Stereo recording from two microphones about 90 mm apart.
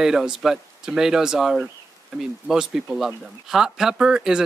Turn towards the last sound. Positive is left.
turn(degrees=-10)  # may be behind; listen again after turning